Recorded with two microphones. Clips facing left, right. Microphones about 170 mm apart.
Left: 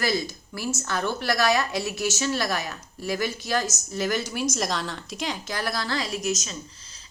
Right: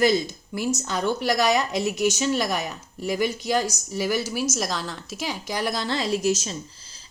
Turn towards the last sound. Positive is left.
turn(degrees=-30)  # may be behind; listen again after turning